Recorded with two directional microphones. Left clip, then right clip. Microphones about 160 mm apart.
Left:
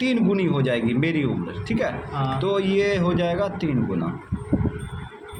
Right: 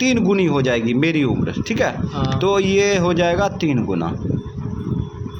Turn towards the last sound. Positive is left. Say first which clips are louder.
# right 6 dB
turn(degrees=-45)  # may be behind; listen again after turning